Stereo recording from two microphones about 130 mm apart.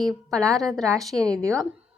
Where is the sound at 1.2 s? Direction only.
25° right (ahead or behind).